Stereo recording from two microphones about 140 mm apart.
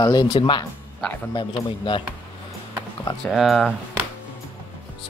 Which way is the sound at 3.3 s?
Centre (ahead or behind).